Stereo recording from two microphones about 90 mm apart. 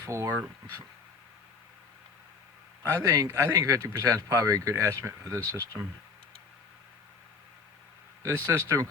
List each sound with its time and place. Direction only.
0.0 s speech: 30° right (ahead or behind)
2.8 s speech: 35° right (ahead or behind)
8.2 s speech: 35° right (ahead or behind)